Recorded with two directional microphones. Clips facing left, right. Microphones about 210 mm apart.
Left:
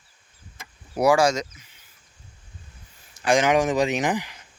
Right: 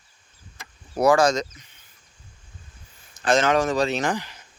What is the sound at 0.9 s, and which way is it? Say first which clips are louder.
Speech: right 1 dB; 10° left (ahead or behind).